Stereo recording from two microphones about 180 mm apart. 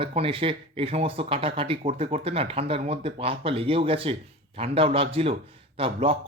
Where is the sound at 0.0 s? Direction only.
30° right (ahead or behind).